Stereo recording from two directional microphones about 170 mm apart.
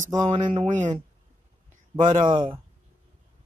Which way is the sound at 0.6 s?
45° right (ahead or behind).